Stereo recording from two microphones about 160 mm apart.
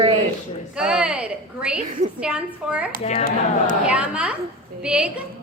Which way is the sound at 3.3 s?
55° right (ahead or behind).